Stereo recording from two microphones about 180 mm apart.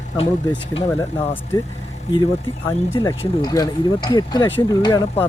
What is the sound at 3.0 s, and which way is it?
Speech, 30° left (ahead or behind).